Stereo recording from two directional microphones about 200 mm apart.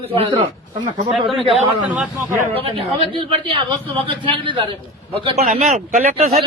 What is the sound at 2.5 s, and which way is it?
A man's voice, 30° right (ahead or behind).